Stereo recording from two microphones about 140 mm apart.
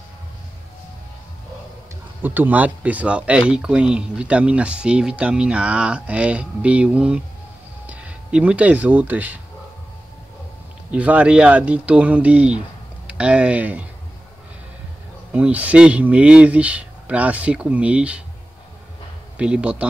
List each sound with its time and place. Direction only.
2.2 s speech: 15° right (ahead or behind)
10.9 s speech: 10° right (ahead or behind)
15.3 s speech: 10° right (ahead or behind)
19.3 s speech: 5° right (ahead or behind)